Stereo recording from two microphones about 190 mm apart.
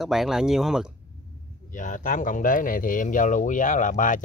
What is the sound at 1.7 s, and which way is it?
Speech, 45° left (ahead or behind).